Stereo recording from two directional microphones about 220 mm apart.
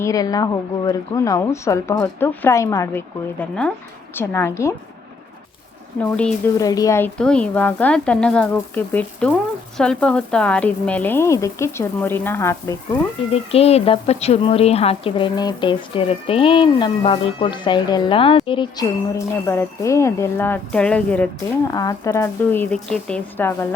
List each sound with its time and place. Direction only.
0.0 s speech: 15° left (ahead or behind)
4.1 s speech: 10° left (ahead or behind)
6.0 s speech: 5° left (ahead or behind)
13.3 s speech: 25° left (ahead or behind); by 23.6 s 10° left (ahead or behind)